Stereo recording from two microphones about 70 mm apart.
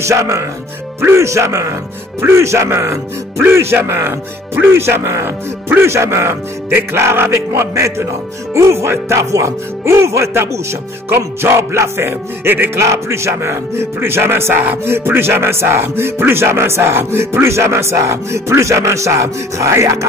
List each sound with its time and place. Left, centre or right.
0.0 s a man's voice: right
12.8 s speech: right